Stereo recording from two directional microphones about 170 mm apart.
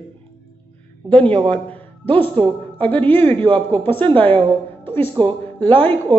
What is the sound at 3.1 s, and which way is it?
Speech, 30° right (ahead or behind).